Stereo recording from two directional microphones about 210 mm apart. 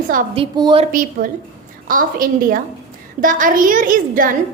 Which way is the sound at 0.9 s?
40° right (ahead or behind).